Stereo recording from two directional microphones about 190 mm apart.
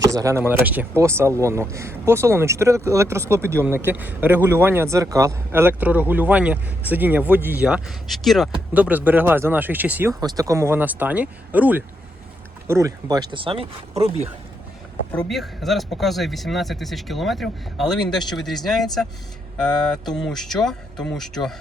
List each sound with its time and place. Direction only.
0.0 s speech: 15° right (ahead or behind); by 14.3 s 30° right (ahead or behind)
15.3 s speech: centre (ahead or behind)